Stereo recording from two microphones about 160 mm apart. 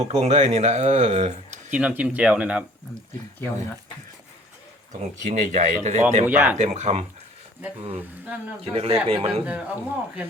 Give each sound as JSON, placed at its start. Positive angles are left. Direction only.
{"t": 0.0, "sound": "speech", "side_deg": -40}
{"t": 1.7, "sound": "speech", "side_deg": -10}
{"t": 5.2, "sound": "speech", "side_deg": -50}
{"t": 6.2, "sound": "speech", "side_deg": -10}
{"t": 6.6, "sound": "speech", "side_deg": -45}
{"t": 9.4, "sound": "speech", "side_deg": -10}